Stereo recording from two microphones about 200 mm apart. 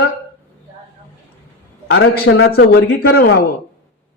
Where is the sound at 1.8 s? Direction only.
90° left.